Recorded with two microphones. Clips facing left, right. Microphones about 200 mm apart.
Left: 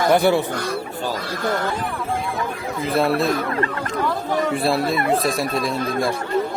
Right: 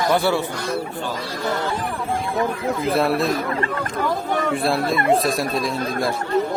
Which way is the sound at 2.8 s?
Centre (ahead or behind).